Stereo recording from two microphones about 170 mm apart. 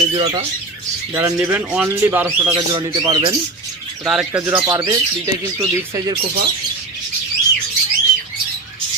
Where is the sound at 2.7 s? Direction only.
25° right (ahead or behind).